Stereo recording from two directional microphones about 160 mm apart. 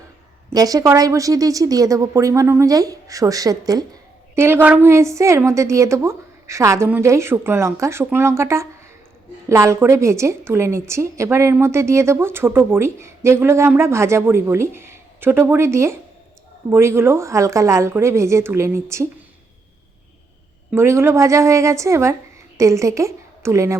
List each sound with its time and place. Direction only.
0.5 s a woman's voice: 20° right (ahead or behind)
20.7 s a woman's voice: 15° right (ahead or behind)